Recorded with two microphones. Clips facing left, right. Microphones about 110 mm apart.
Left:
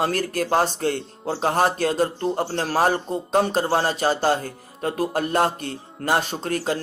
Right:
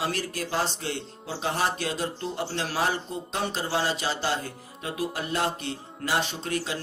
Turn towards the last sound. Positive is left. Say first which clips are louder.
# left 6 dB
turn(degrees=45)  # may be behind; listen again after turning